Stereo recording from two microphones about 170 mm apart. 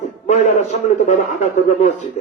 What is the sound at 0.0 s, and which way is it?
Speech, 40° left (ahead or behind).